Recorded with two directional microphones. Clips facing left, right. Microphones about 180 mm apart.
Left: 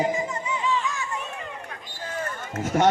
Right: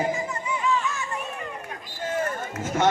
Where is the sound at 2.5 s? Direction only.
35° left (ahead or behind).